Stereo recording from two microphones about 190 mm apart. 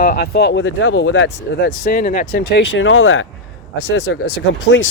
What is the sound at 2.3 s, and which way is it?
Speech, 65° left (ahead or behind).